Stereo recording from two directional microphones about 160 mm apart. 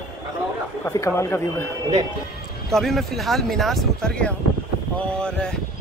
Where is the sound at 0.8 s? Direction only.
15° left (ahead or behind).